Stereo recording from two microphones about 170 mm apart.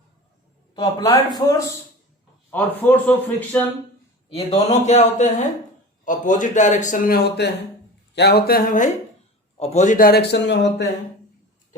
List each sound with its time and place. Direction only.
0.8 s speech: 20° left (ahead or behind)
2.5 s a man's voice: 10° left (ahead or behind)
4.3 s a man's voice: 35° left (ahead or behind); by 7.2 s 50° left (ahead or behind)
7.4 s speech: 80° left; by 8.9 s 50° left (ahead or behind)
9.6 s a man's voice: 40° left (ahead or behind); by 10.8 s 90° left